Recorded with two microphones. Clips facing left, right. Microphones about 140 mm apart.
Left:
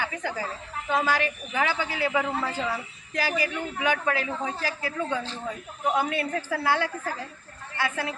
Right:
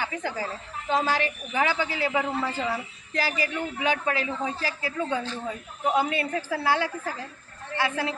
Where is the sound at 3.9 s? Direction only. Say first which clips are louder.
Even; 15° right (ahead or behind).